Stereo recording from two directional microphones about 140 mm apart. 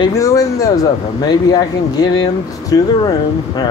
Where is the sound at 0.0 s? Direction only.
25° left (ahead or behind).